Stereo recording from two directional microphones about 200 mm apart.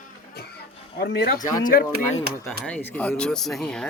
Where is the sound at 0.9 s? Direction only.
50° left (ahead or behind).